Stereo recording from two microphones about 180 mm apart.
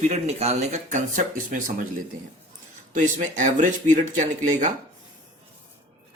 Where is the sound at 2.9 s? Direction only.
45° right (ahead or behind).